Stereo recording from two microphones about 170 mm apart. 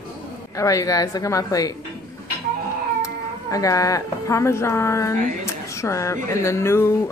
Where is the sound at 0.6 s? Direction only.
20° left (ahead or behind).